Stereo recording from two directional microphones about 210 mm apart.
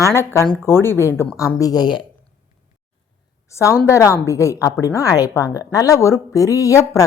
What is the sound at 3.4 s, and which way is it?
A woman's voice, 15° left (ahead or behind).